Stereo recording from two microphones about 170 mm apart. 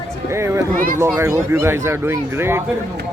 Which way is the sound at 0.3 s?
15° right (ahead or behind).